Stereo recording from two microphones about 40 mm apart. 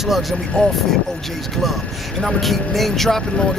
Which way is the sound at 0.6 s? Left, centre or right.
Centre.